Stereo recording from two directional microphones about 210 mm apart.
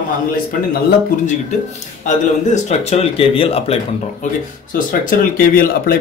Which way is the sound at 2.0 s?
35° left (ahead or behind).